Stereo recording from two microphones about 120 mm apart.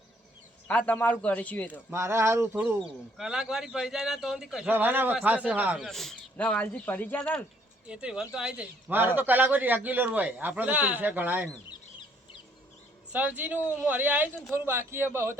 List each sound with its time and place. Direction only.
0.7 s a man's voice: 10° left (ahead or behind)
1.9 s a man's voice: 20° right (ahead or behind)
3.2 s a man's voice: 5° right (ahead or behind)
4.7 s speech: 15° right (ahead or behind)
5.9 s a man's voice: 5° left (ahead or behind)
7.9 s speech: 10° right (ahead or behind)
13.1 s a man's voice: 15° right (ahead or behind)